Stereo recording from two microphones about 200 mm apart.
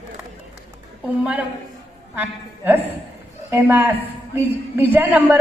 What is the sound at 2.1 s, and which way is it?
A woman's voice, 10° right (ahead or behind).